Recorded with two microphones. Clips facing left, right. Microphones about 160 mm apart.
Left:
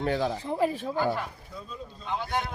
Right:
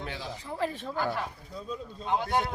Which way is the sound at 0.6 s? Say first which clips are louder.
Left 4 dB; 10° left (ahead or behind).